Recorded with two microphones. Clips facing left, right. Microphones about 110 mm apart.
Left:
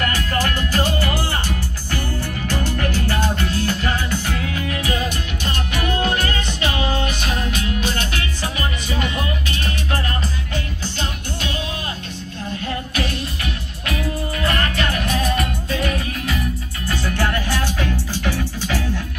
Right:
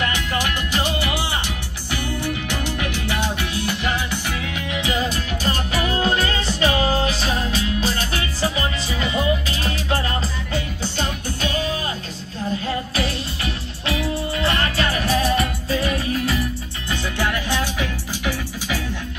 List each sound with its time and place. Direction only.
0.0 s music: 15° right (ahead or behind)
5.1 s music: 35° right (ahead or behind)
13.8 s music: 30° right (ahead or behind)
17.2 s music: 15° right (ahead or behind)